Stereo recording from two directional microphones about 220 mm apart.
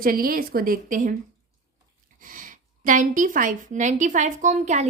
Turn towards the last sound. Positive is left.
turn(degrees=-30)  # may be behind; listen again after turning